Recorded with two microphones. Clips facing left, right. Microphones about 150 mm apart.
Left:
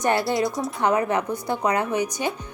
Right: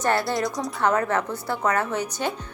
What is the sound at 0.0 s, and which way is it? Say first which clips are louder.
Speech: left 2 dB; 20° left (ahead or behind).